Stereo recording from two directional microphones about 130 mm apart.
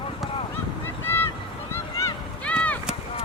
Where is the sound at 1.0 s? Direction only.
15° left (ahead or behind).